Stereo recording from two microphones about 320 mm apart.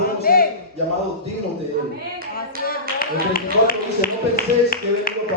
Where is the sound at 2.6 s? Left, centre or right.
Left.